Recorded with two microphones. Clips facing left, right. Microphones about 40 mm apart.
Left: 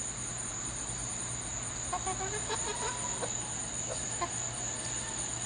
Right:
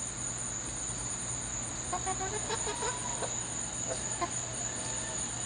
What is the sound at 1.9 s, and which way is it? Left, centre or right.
Speech, centre.